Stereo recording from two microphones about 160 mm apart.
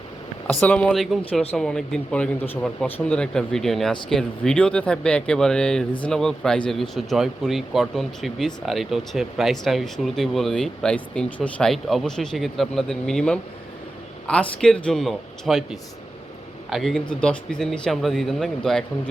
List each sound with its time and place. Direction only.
0.6 s speech: 10° left (ahead or behind)